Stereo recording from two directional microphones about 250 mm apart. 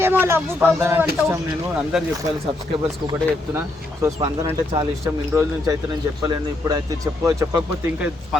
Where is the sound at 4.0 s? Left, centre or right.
Centre.